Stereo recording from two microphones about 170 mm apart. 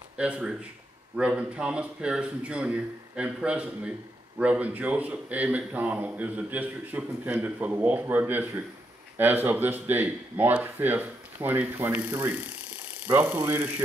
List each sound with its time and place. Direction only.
0.2 s a man's voice: 5° right (ahead or behind)